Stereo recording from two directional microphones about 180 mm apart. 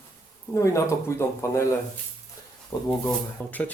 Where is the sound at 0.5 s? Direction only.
15° left (ahead or behind).